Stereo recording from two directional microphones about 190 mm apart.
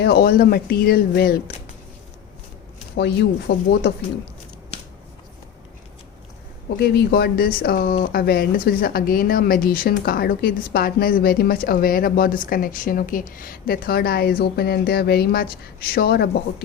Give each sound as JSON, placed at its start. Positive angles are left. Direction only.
{"t": 0.0, "sound": "speech", "side_deg": 55}
{"t": 2.9, "sound": "speech", "side_deg": 55}
{"t": 6.7, "sound": "speech", "side_deg": 55}